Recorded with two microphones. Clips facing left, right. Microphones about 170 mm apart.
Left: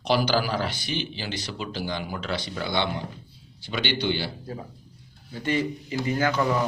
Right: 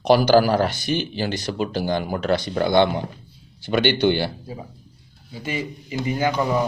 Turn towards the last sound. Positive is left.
turn(degrees=-15)  # may be behind; listen again after turning